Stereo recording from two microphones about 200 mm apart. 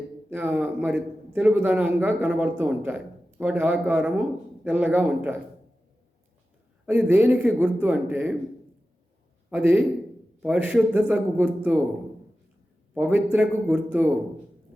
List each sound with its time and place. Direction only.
0.3 s a man's voice: 5° right (ahead or behind)
6.8 s a man's voice: 10° right (ahead or behind)
9.5 s a man's voice: 10° right (ahead or behind)
12.9 s a man's voice: 10° right (ahead or behind)